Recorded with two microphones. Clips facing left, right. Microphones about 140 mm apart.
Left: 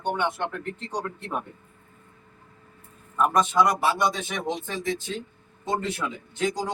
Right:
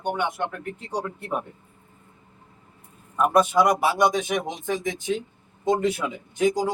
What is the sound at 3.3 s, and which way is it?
Speech, 10° right (ahead or behind).